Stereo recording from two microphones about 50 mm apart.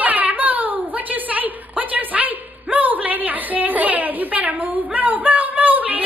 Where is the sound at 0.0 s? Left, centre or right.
Right.